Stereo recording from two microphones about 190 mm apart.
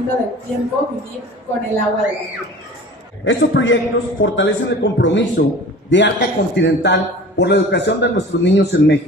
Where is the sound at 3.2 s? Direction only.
80° left.